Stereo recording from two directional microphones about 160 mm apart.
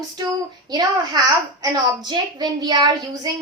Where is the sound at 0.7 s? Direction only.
25° right (ahead or behind).